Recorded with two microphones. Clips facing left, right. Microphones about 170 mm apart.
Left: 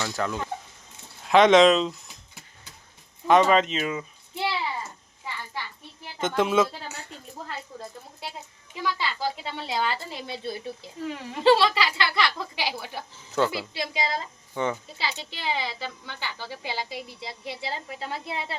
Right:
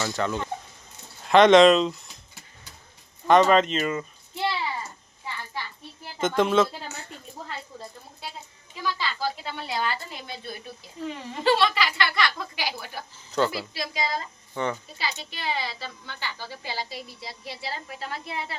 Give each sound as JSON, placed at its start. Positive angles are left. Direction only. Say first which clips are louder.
{"t": 0.0, "sound": "speech", "louder": "right 1 dB", "side_deg": 0}
{"t": 3.2, "sound": "speech", "louder": "right 1 dB", "side_deg": 5}
{"t": 6.1, "sound": "speech", "louder": "right 1 dB", "side_deg": 0}
{"t": 6.8, "sound": "a sound", "louder": "even", "side_deg": 10}
{"t": 8.7, "sound": "a woman's voice", "louder": "left 1 dB", "side_deg": 20}
{"t": 11.0, "sound": "a woman's voice", "louder": "even", "side_deg": 5}
{"t": 11.4, "sound": "a woman's voice", "louder": "left 3 dB", "side_deg": 30}
{"t": 14.5, "sound": "speech", "louder": "left 1 dB", "side_deg": 10}
{"t": 14.9, "sound": "a woman's voice", "louder": "even", "side_deg": 20}